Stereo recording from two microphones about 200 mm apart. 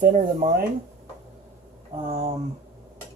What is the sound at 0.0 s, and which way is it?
Speech, 35° right (ahead or behind).